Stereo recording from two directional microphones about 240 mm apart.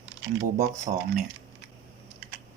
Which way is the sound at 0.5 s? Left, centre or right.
Right.